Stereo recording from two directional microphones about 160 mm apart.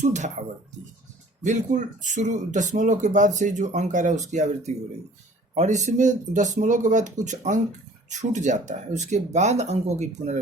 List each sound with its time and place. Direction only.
0.0 s speech: 50° right (ahead or behind)
1.5 s speech: 50° right (ahead or behind)